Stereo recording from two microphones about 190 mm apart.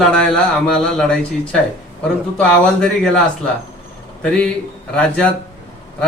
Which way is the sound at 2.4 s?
5° left (ahead or behind).